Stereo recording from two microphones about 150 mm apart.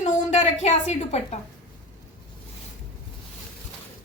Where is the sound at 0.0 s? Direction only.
50° left (ahead or behind).